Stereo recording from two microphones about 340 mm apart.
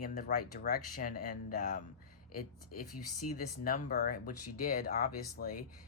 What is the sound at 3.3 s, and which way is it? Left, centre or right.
Speech, left.